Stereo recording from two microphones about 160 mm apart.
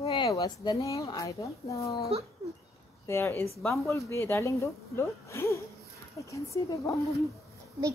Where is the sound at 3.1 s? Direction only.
15° left (ahead or behind).